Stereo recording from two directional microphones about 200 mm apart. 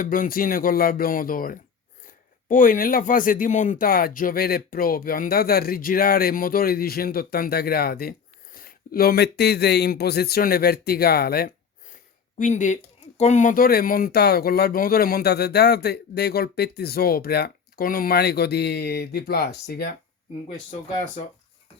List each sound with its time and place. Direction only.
0.0 s speech: 45° left (ahead or behind)